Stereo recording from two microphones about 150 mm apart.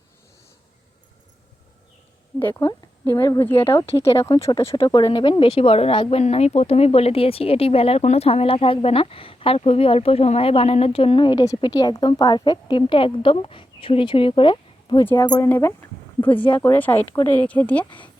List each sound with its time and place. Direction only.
2.4 s speech: 15° left (ahead or behind)
4.9 s speech: 30° left (ahead or behind)
15.4 s speech: 15° left (ahead or behind)